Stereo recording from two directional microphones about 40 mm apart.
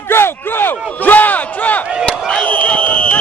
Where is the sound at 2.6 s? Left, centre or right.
Left.